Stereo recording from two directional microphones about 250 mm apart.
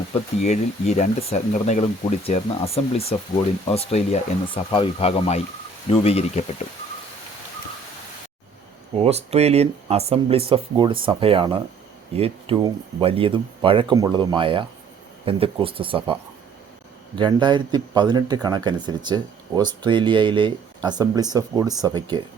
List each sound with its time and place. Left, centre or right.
0.1 s speech: left
9.0 s speech: right
17.2 s speech: centre